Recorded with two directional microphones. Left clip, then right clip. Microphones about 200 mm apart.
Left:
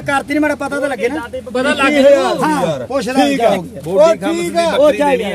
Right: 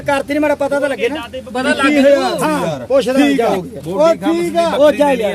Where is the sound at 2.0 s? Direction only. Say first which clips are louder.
Left 3 dB; 25° left (ahead or behind).